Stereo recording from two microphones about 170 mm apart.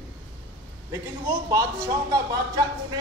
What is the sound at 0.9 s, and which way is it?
A man's voice, 20° right (ahead or behind).